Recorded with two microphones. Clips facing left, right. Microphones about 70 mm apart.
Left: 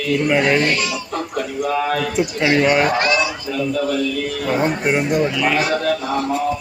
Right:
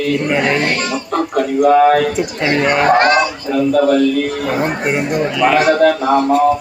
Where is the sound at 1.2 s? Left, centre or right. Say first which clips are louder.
Right 10 dB; right.